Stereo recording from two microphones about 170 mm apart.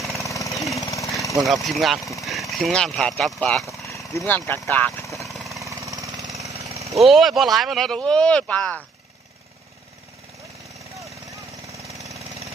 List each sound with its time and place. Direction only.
0.2 s jackhammer: 20° left (ahead or behind)
1.4 s speech: centre (ahead or behind)
3.8 s dog: 20° left (ahead or behind)
4.3 s speech: 10° left (ahead or behind)
5.5 s jackhammer: 20° right (ahead or behind)
7.0 s speech: centre (ahead or behind)
12.0 s a sound: 20° right (ahead or behind)